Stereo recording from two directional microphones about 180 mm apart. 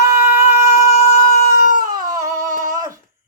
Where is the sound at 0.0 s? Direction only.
15° right (ahead or behind).